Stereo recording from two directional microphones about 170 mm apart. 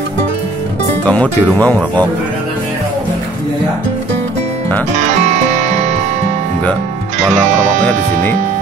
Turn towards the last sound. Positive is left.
turn(degrees=-45)  # may be behind; listen again after turning